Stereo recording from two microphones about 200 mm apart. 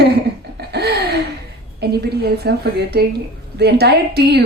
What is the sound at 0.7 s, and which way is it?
Gasp, 55° right (ahead or behind).